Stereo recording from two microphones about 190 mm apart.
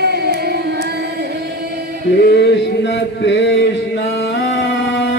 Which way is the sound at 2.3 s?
65° left (ahead or behind).